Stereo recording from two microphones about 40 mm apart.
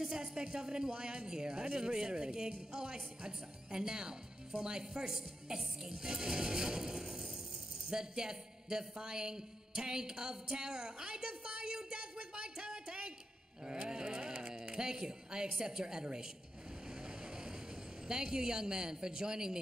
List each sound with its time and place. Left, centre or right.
0.1 s a woman's voice: centre
13.7 s a sound: centre
15.6 s a woman's voice: centre
18.0 s a woman's voice: centre